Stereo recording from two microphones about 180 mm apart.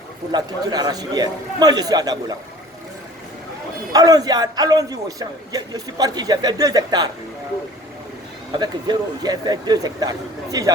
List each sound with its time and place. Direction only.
0.3 s a man's voice: 20° right (ahead or behind)
3.9 s a man's voice: 20° right (ahead or behind)
8.5 s a man's voice: 25° right (ahead or behind)